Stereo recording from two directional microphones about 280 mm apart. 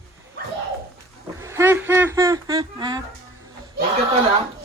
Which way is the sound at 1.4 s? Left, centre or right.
Centre.